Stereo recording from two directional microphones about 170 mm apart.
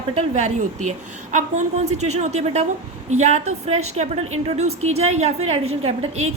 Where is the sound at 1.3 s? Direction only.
45° right (ahead or behind).